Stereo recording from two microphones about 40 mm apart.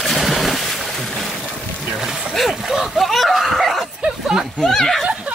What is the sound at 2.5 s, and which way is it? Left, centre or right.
Speech, centre.